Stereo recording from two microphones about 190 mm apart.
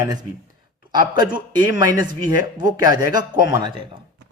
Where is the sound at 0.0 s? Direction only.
20° right (ahead or behind).